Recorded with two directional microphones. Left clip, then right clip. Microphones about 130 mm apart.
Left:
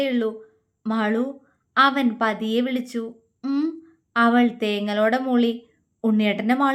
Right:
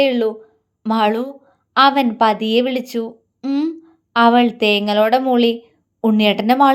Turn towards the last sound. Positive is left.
turn(degrees=-30)  # may be behind; listen again after turning